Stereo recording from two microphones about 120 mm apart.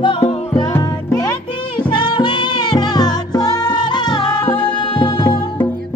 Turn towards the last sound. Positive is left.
turn(degrees=35)  # may be behind; listen again after turning